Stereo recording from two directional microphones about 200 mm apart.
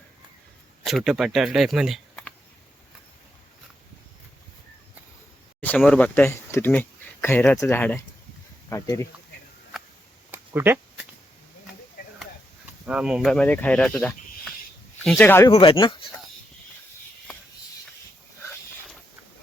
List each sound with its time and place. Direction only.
0.9 s speech: centre (ahead or behind)
5.5 s speech: 5° left (ahead or behind)
9.7 s a sound: centre (ahead or behind)
12.8 s speech: 5° right (ahead or behind); by 16.0 s 25° left (ahead or behind)